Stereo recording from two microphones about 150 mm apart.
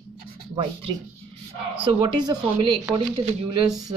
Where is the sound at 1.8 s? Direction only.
30° right (ahead or behind).